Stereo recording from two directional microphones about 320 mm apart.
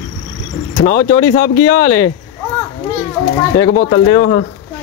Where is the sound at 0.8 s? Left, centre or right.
Centre.